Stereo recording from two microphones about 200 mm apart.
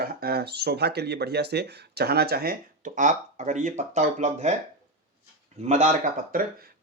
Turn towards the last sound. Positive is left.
turn(degrees=-35)  # may be behind; listen again after turning